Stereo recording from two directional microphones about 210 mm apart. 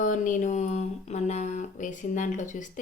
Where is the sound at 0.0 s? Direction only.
40° left (ahead or behind).